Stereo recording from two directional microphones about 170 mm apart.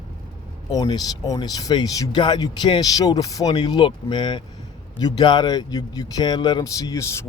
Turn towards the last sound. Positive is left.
turn(degrees=15)  # may be behind; listen again after turning